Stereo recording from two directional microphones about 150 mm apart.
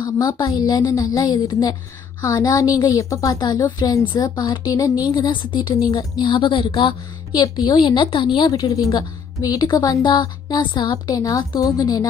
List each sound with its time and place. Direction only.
0.0 s a woman's voice: 30° left (ahead or behind)
5.3 s a woman's voice: 35° left (ahead or behind)
6.9 s a woman's voice: 25° left (ahead or behind)